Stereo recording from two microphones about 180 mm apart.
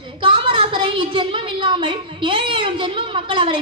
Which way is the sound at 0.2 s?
30° right (ahead or behind).